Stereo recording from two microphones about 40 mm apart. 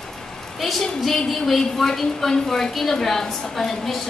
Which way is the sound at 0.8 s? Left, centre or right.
Centre.